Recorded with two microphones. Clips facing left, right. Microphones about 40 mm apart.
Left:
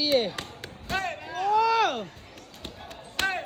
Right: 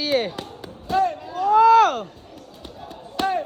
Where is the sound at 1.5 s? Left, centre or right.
Right.